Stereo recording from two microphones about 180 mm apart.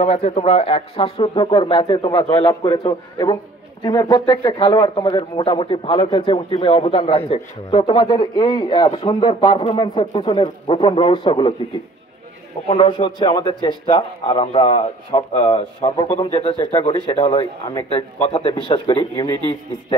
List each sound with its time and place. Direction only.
0.0 s a man's voice: 35° left (ahead or behind)
12.6 s a man's voice: 30° left (ahead or behind)